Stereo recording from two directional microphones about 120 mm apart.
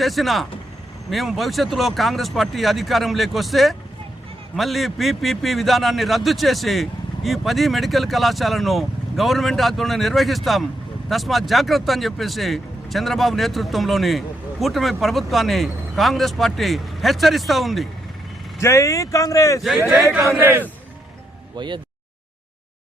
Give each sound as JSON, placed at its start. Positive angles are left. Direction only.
{"t": 0.0, "sound": "speech", "side_deg": 0}
{"t": 18.6, "sound": "speech", "side_deg": 25}
{"t": 20.4, "sound": "speech", "side_deg": -15}
{"t": 21.5, "sound": "speech", "side_deg": -40}